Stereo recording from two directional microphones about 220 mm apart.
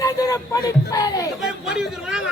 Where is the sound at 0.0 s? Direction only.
15° left (ahead or behind).